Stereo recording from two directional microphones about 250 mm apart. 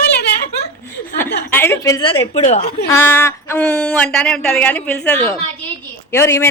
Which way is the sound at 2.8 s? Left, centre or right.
Centre.